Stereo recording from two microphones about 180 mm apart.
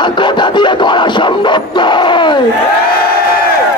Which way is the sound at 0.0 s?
25° left (ahead or behind).